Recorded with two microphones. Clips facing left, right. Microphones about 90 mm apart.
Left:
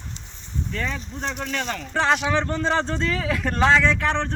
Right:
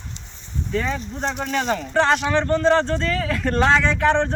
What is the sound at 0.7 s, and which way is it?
Speech, 10° right (ahead or behind).